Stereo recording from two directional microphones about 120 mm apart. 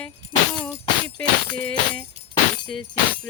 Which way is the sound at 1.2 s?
10° left (ahead or behind).